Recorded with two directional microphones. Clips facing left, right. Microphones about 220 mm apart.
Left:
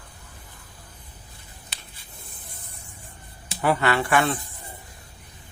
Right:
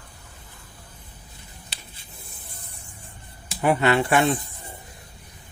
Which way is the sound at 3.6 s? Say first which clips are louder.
Right 2 dB; 20° right (ahead or behind).